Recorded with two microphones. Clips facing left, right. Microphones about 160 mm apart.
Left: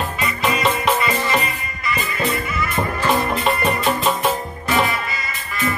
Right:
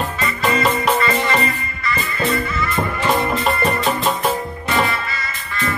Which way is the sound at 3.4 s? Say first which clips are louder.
Right 1 dB; centre (ahead or behind).